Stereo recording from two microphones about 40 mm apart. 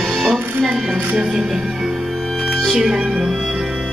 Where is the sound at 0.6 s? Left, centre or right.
Centre.